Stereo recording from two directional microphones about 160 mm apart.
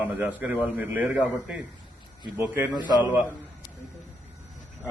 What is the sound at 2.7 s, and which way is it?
Speech, 25° left (ahead or behind).